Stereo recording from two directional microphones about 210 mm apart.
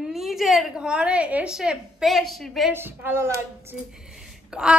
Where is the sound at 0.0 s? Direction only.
Centre (ahead or behind).